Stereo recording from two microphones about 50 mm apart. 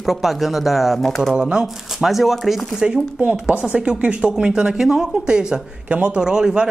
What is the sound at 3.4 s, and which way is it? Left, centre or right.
Speech, right.